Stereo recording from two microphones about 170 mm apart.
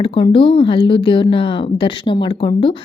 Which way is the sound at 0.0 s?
30° left (ahead or behind).